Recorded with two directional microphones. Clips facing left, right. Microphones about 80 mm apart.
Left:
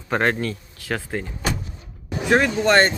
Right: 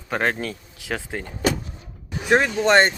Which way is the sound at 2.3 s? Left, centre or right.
Right.